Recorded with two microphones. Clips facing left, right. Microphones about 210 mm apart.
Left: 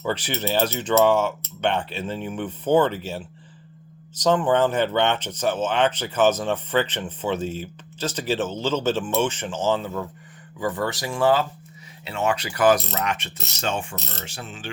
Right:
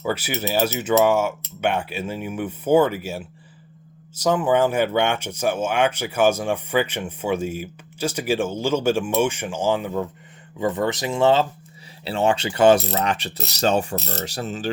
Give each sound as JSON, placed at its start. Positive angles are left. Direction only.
{"t": 0.0, "sound": "speech", "side_deg": -10}
{"t": 12.0, "sound": "mechanisms", "side_deg": -30}